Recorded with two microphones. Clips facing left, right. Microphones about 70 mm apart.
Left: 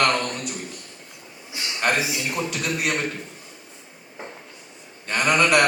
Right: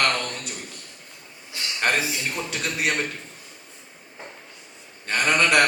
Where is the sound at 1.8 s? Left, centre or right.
Centre.